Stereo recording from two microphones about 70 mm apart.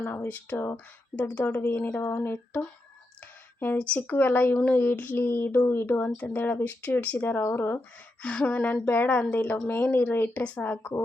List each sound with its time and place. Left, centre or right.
0.2 s speech: left
1.4 s speech: centre
1.6 s speech: left
3.8 s speech: left
8.2 s speech: centre